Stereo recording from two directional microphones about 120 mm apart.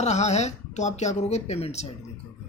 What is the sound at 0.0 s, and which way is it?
Speech, 65° left (ahead or behind).